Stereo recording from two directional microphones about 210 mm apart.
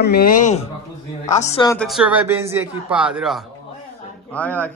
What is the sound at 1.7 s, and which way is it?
A man's voice, centre (ahead or behind).